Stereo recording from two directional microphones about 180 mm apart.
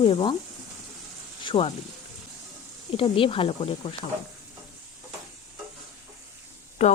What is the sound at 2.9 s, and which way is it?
Speech, 30° left (ahead or behind).